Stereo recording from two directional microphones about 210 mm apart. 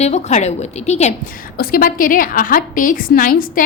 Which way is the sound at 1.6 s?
45° left (ahead or behind).